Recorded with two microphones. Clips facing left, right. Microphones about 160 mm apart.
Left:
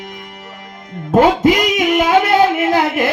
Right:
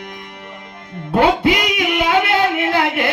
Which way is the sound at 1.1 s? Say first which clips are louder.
Left 3 dB; 40° left (ahead or behind).